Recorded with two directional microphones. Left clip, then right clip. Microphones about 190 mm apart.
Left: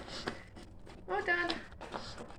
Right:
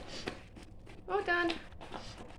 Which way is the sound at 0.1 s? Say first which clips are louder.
Left 1 dB; 15° right (ahead or behind).